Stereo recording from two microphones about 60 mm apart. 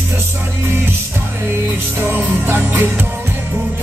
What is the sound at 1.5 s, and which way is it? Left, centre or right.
Music, right.